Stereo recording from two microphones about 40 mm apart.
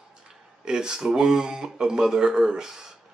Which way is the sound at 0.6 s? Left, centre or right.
Centre.